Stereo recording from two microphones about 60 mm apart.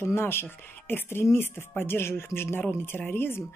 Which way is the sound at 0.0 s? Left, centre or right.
Left.